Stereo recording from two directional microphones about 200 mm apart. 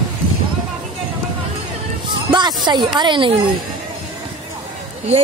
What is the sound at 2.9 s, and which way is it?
Speech, 25° right (ahead or behind).